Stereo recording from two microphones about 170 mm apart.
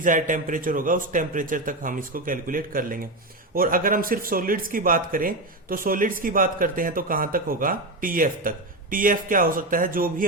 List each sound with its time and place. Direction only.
0.0 s a man's voice: 50° right (ahead or behind)